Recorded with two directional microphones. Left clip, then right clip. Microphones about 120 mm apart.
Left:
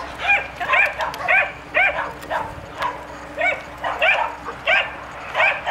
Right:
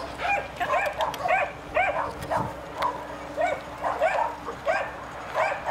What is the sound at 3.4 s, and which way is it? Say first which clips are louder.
Dog: left 5 dB; 50° left (ahead or behind).